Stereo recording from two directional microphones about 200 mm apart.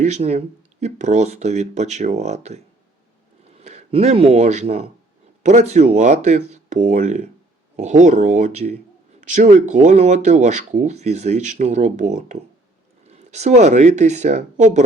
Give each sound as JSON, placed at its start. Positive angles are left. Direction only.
{"t": 0.0, "sound": "speech", "side_deg": -35}
{"t": 3.6, "sound": "speech", "side_deg": -30}